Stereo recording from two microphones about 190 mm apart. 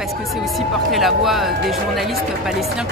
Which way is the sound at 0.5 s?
Centre (ahead or behind).